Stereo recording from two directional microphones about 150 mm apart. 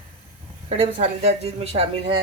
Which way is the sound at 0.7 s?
45° right (ahead or behind).